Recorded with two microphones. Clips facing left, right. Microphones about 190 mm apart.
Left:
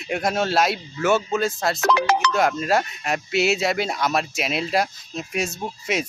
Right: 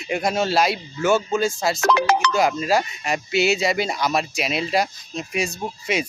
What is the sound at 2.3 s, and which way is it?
Speech, centre (ahead or behind).